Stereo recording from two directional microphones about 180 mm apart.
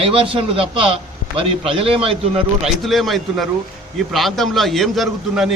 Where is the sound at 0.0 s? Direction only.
30° right (ahead or behind).